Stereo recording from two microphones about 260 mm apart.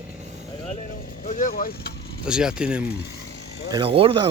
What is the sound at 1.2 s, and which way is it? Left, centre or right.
Speech, left.